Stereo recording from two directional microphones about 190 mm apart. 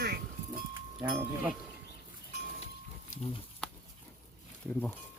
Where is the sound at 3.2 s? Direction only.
35° left (ahead or behind).